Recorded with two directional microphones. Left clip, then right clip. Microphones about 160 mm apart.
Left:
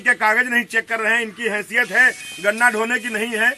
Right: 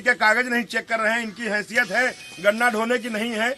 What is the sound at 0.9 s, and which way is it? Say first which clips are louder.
Speech: left 3 dB; 15° right (ahead or behind).